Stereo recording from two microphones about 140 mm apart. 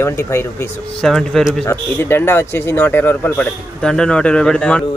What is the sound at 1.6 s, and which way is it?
Speech, 15° left (ahead or behind).